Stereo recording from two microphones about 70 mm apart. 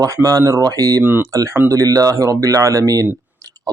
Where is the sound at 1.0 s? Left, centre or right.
Right.